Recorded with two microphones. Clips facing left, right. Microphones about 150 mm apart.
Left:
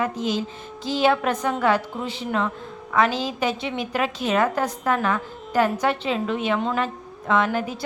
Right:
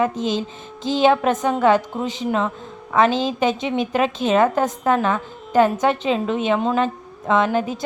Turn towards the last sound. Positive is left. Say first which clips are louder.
# right 3 dB
turn(degrees=-20)  # may be behind; listen again after turning